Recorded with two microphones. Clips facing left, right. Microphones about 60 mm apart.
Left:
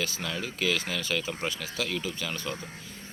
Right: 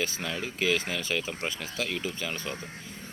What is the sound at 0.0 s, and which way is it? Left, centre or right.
Speech, centre.